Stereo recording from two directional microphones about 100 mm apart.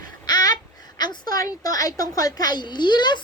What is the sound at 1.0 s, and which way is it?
A woman's voice, 40° left (ahead or behind).